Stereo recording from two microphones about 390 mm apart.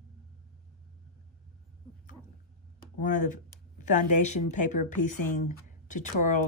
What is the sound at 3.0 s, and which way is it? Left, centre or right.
Speech, centre.